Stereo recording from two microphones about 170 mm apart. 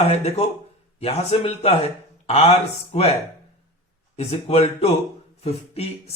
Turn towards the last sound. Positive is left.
turn(degrees=40)  # may be behind; listen again after turning